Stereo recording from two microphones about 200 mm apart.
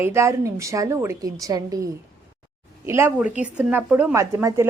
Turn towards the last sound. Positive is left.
turn(degrees=-15)  # may be behind; listen again after turning